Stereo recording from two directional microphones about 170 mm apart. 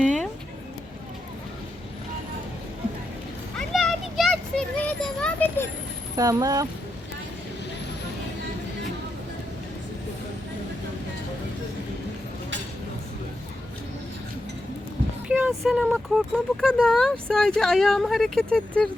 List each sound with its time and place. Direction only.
3.6 s children playing: centre (ahead or behind)
6.1 s speech: 20° right (ahead or behind)
15.3 s a sound: 5° right (ahead or behind)
15.9 s speech: centre (ahead or behind)